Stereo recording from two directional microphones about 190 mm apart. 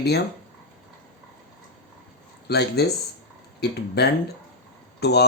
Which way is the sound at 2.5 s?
60° left (ahead or behind).